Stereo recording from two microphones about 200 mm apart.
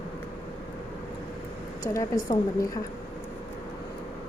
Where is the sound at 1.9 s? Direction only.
20° left (ahead or behind).